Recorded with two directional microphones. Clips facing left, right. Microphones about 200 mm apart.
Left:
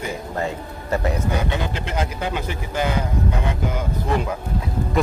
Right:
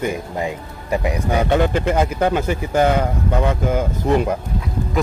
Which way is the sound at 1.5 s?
50° right (ahead or behind).